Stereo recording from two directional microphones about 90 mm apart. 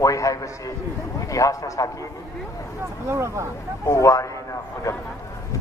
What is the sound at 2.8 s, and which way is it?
Speech, 30° right (ahead or behind).